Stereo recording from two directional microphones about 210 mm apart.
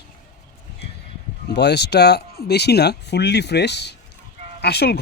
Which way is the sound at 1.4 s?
55° left (ahead or behind).